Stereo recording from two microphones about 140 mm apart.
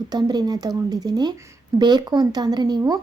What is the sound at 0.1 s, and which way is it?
Speech, 30° right (ahead or behind).